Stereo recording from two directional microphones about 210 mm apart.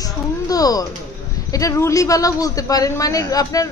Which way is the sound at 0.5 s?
15° left (ahead or behind).